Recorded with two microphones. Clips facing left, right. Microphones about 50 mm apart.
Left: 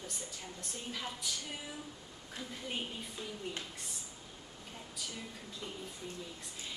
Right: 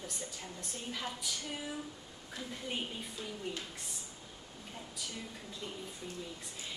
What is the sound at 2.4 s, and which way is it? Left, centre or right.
Speech, centre.